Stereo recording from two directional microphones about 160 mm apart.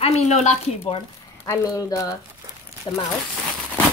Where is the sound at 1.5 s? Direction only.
20° left (ahead or behind).